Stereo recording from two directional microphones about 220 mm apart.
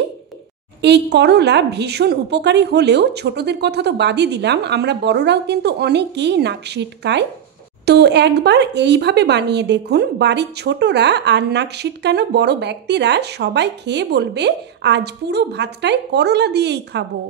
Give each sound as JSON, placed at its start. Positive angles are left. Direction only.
{"t": 0.8, "sound": "speech", "side_deg": -50}